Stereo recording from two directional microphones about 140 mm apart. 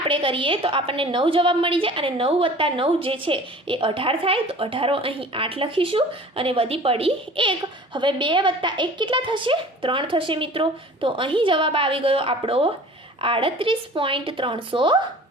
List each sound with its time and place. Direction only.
0.1 s a woman's voice: 40° right (ahead or behind)